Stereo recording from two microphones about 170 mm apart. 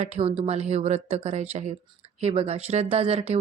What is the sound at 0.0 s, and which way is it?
Speech, 35° right (ahead or behind).